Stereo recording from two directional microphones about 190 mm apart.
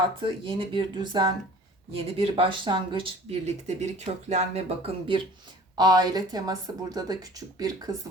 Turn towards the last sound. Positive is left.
turn(degrees=-20)  # may be behind; listen again after turning